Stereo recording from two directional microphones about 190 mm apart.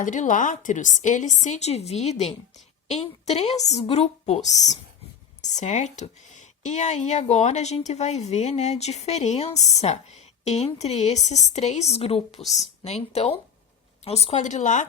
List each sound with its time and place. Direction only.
0.0 s a woman's voice: 40° left (ahead or behind)